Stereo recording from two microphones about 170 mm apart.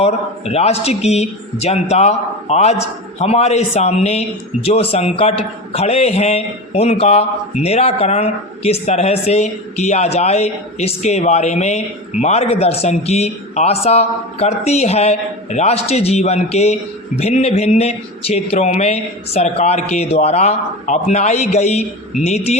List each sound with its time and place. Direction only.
0.0 s a man's voice: 40° left (ahead or behind)